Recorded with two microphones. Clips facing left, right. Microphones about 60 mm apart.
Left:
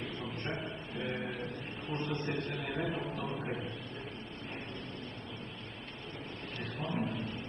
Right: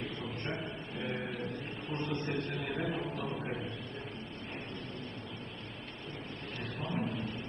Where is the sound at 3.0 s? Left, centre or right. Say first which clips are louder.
Even; left.